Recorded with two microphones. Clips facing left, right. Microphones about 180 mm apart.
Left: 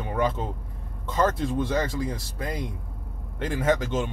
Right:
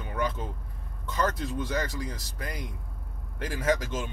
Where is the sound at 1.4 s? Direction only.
25° left (ahead or behind).